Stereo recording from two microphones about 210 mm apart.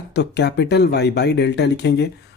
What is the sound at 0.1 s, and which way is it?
Speech, 55° left (ahead or behind).